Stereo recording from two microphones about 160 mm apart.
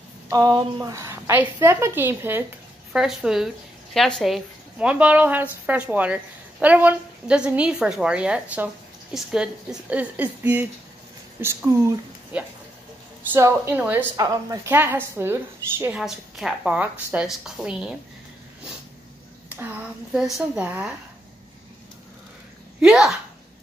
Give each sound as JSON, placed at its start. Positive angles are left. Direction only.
{"t": 0.3, "sound": "a woman's voice", "side_deg": -25}
{"t": 14.1, "sound": "a woman's voice", "side_deg": -20}
{"t": 16.0, "sound": "a woman's voice", "side_deg": -5}
{"t": 19.5, "sound": "a woman's voice", "side_deg": -5}
{"t": 22.8, "sound": "a woman's voice", "side_deg": 0}